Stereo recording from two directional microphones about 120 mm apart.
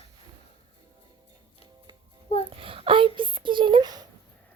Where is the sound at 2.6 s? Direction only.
50° right (ahead or behind).